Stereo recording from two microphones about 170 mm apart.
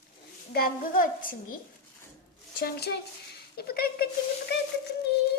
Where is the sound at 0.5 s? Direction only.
55° left (ahead or behind).